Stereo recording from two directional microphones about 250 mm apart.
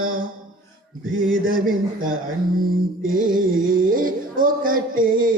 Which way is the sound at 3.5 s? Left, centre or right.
Right.